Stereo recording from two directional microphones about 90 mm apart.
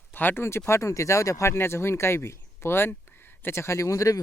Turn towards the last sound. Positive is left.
turn(degrees=40)  # may be behind; listen again after turning